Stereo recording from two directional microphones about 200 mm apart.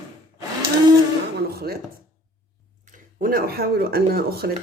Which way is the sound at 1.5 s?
50° right (ahead or behind).